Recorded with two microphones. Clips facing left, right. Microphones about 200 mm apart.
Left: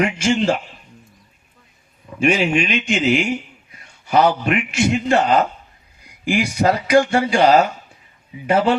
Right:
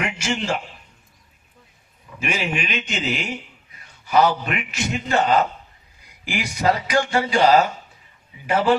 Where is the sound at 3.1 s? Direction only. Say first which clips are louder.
Left 10 dB; 50° left (ahead or behind).